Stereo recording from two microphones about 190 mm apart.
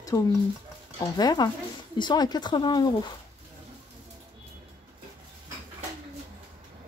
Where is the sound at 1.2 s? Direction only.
20° left (ahead or behind).